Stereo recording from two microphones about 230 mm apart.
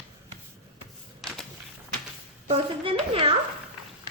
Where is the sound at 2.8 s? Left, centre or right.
Right.